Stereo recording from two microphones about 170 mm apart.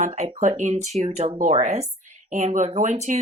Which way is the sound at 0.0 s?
40° right (ahead or behind).